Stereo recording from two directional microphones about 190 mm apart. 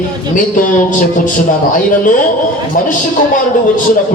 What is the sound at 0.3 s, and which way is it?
A man's voice, 45° left (ahead or behind).